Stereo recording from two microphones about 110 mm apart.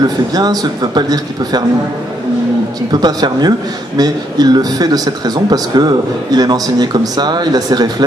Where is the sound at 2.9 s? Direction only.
40° right (ahead or behind).